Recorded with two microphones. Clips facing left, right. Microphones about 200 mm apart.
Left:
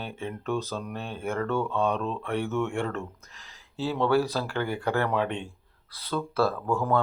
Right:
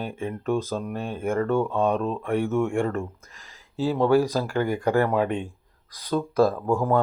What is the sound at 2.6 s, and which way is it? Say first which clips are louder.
Speech: right 5 dB; 50° right (ahead or behind).